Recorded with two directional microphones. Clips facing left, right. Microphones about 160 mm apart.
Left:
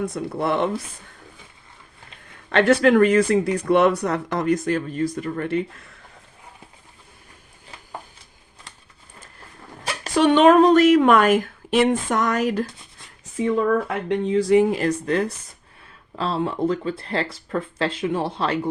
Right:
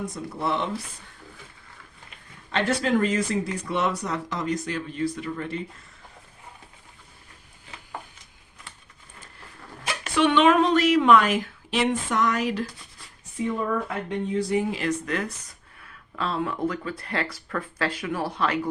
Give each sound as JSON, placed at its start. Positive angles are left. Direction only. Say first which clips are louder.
{"t": 0.0, "sound": "speech", "louder": "left 5 dB", "side_deg": 60}
{"t": 2.5, "sound": "speech", "louder": "left 8 dB", "side_deg": 65}
{"t": 9.8, "sound": "speech", "louder": "left 4 dB", "side_deg": 35}
{"t": 14.1, "sound": "speech", "louder": "left 8 dB", "side_deg": 90}
{"t": 14.7, "sound": "speech", "louder": "left 5 dB", "side_deg": 40}